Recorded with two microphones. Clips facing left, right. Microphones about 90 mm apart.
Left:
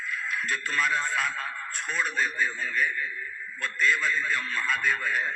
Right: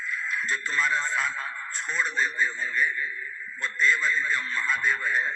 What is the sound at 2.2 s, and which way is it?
Speech, 55° left (ahead or behind).